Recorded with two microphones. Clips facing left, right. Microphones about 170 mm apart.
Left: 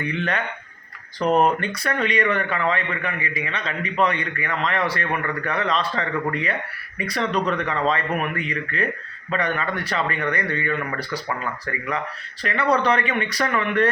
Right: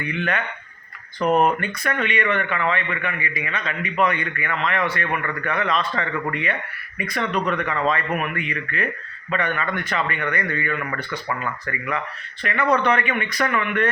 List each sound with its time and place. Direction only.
0.0 s speech: 35° left (ahead or behind)
1.2 s speech: 5° right (ahead or behind)
1.5 s speech: 35° left (ahead or behind)